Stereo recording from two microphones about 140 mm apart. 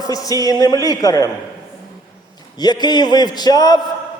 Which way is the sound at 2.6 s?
30° left (ahead or behind).